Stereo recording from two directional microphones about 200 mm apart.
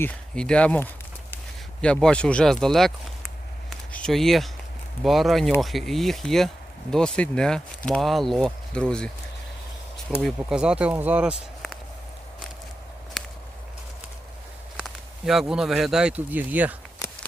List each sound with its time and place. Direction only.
0.0 s speech: 5° left (ahead or behind)
3.7 s a sound: centre (ahead or behind)
5.0 s speech: centre (ahead or behind)
10.2 s speech: centre (ahead or behind)
14.8 s speech: centre (ahead or behind)
17.0 s walk: 15° left (ahead or behind)